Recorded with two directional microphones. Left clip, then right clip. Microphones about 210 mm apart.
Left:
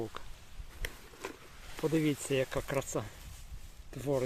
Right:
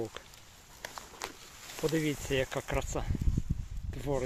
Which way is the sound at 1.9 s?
15° left (ahead or behind).